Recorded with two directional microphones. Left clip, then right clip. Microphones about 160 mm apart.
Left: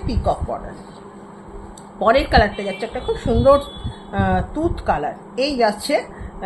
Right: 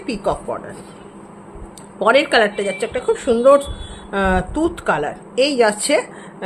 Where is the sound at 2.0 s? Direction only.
35° right (ahead or behind).